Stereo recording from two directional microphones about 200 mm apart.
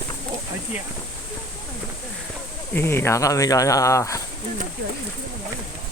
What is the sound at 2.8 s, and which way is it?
Speech, 10° left (ahead or behind).